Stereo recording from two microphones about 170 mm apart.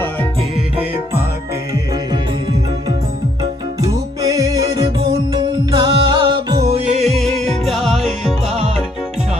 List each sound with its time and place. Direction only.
3.8 s music: 20° right (ahead or behind)
6.7 s music: 40° right (ahead or behind)
7.0 s music: centre (ahead or behind)